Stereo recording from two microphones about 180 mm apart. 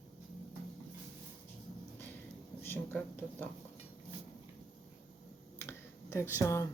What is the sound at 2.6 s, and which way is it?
Speech, 10° left (ahead or behind).